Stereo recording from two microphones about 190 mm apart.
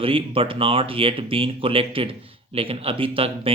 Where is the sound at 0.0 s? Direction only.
30° right (ahead or behind).